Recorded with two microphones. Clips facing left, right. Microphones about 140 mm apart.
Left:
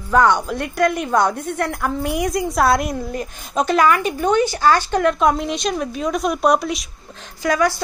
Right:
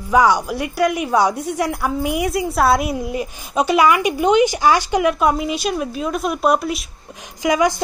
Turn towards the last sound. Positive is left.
turn(degrees=-15)  # may be behind; listen again after turning